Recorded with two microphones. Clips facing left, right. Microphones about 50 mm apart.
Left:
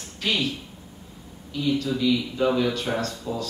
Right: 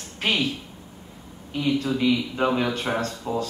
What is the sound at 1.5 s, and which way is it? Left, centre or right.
A man's voice, right.